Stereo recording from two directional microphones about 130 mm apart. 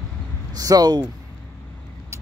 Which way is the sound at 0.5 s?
30° right (ahead or behind).